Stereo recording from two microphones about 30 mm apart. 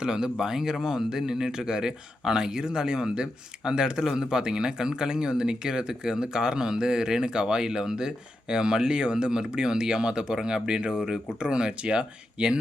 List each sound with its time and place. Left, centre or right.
0.0 s speech: right